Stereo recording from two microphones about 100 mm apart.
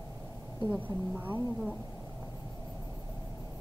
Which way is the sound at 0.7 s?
20° right (ahead or behind).